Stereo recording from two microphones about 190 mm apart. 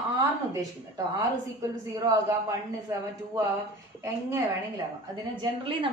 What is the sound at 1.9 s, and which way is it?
Speech, 20° right (ahead or behind).